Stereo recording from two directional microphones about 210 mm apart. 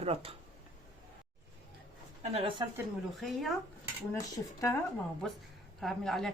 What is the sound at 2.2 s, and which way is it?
Speech, 30° right (ahead or behind).